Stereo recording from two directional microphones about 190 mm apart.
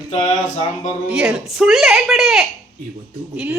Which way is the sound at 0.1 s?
30° left (ahead or behind).